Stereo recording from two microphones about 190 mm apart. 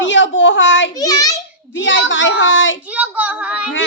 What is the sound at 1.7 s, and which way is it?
A woman's voice, 75° left (ahead or behind).